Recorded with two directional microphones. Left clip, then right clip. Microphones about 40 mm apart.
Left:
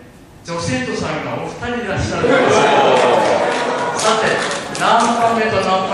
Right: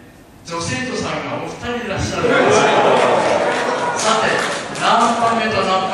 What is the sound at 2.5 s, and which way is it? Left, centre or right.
Speech, centre.